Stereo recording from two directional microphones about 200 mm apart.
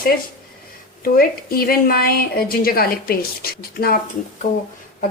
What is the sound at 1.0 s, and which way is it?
A woman's voice, 50° left (ahead or behind).